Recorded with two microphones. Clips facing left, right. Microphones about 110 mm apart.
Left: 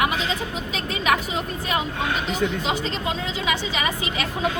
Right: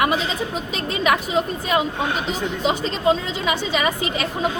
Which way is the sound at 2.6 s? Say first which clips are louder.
Right 6 dB; 40° right (ahead or behind).